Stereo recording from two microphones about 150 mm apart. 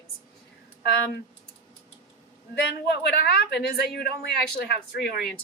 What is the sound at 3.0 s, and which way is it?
A woman's voice, 90° left.